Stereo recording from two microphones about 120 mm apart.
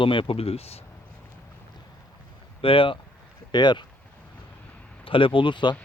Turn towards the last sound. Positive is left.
turn(degrees=40)  # may be behind; listen again after turning